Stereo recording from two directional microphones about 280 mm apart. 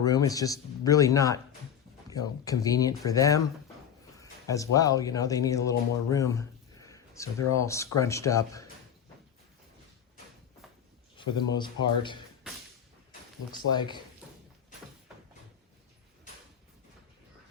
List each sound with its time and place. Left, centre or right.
0.0 s speech: centre
11.2 s speech: centre
13.7 s speech: centre